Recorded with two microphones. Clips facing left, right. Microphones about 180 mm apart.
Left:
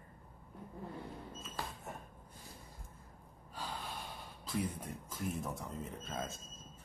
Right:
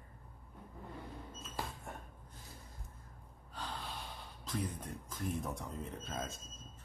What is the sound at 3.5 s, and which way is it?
Gasp, 10° left (ahead or behind).